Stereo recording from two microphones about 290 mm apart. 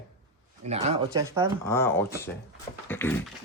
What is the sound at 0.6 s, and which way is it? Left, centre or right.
Speech, right.